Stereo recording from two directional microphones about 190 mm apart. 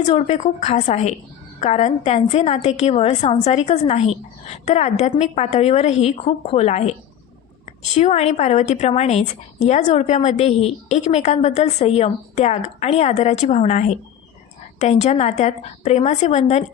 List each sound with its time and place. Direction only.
0.0 s a woman's voice: 35° left (ahead or behind)
7.9 s a woman's voice: 35° left (ahead or behind)